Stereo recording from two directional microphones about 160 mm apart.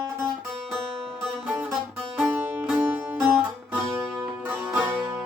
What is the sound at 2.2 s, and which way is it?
Music, 10° right (ahead or behind).